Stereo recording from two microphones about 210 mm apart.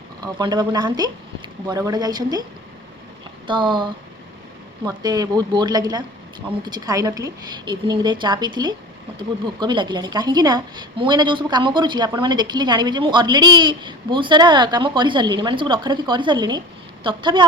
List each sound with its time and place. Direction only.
0.2 s a woman's voice: 20° right (ahead or behind)
3.4 s a woman's voice: 20° right (ahead or behind)